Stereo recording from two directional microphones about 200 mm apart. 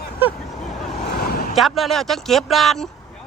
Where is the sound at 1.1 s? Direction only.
50° left (ahead or behind).